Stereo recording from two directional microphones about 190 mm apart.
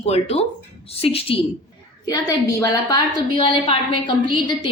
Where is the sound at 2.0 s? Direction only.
20° left (ahead or behind).